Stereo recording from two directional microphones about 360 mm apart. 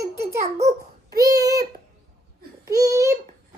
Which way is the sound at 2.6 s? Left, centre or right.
Centre.